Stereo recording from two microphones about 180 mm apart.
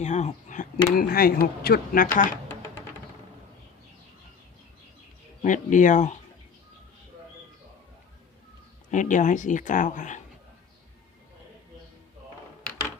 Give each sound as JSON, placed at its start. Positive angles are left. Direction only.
{"t": 0.0, "sound": "speech", "side_deg": 40}
{"t": 5.4, "sound": "speech", "side_deg": 45}
{"t": 8.9, "sound": "speech", "side_deg": 45}